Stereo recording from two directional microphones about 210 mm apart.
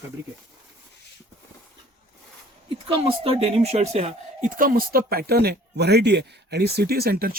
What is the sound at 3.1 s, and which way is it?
Speech, 30° right (ahead or behind).